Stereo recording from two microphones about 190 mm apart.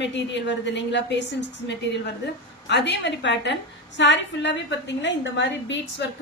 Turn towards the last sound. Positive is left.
turn(degrees=70)  # may be behind; listen again after turning